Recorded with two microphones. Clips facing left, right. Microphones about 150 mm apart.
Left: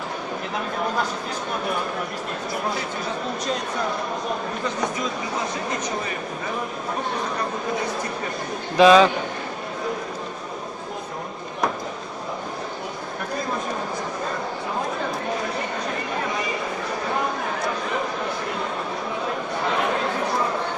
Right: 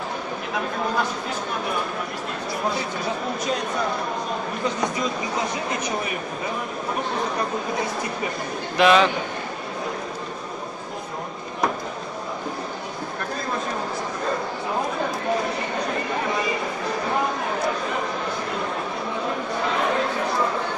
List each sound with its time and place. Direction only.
8.7 s a man's voice: 15° left (ahead or behind)